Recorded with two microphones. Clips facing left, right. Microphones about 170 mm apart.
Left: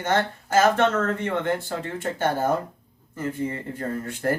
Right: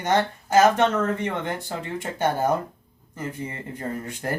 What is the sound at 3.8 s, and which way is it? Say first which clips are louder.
Speech: left 2 dB; 15° right (ahead or behind).